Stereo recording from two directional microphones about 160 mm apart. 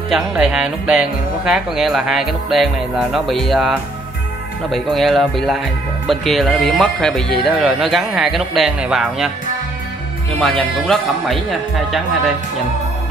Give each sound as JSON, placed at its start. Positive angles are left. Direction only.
{"t": 0.1, "sound": "speech", "side_deg": -5}
{"t": 10.4, "sound": "speech", "side_deg": 0}